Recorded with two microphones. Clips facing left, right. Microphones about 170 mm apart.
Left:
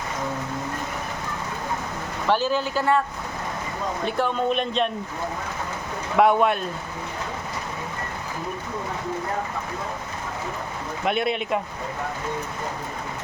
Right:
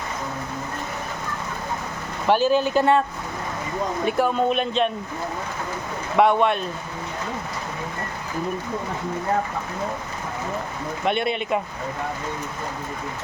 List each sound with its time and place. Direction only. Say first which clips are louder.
2.2 s speech: right 4 dB; 15° right (ahead or behind)
4.0 s a man's voice: right 3 dB; 10° right (ahead or behind)
6.1 s a man's voice: even; centre (ahead or behind)
11.0 s a man's voice: even; centre (ahead or behind)